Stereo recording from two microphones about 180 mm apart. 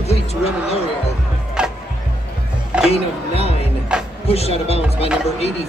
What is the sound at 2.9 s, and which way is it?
Speech, 35° left (ahead or behind).